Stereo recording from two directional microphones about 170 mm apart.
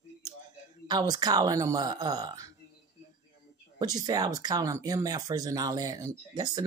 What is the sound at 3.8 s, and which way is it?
Speech, 20° right (ahead or behind).